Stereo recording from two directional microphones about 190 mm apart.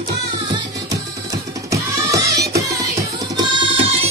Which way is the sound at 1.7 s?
15° right (ahead or behind).